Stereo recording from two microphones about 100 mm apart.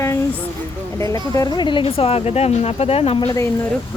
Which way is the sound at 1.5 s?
55° left (ahead or behind).